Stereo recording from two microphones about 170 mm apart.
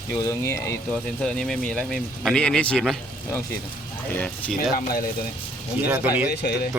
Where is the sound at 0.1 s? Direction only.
15° left (ahead or behind).